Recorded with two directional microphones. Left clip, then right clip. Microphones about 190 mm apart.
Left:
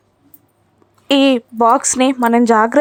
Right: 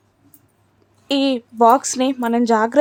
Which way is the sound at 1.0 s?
25° left (ahead or behind).